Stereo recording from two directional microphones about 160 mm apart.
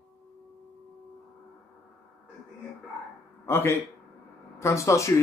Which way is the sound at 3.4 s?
15° left (ahead or behind).